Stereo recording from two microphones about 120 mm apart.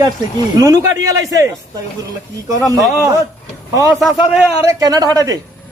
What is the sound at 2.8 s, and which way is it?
Speech, 30° right (ahead or behind).